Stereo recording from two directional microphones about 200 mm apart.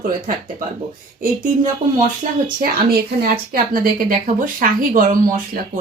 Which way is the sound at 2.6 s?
50° right (ahead or behind).